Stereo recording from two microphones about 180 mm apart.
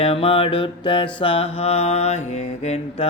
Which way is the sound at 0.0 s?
30° left (ahead or behind).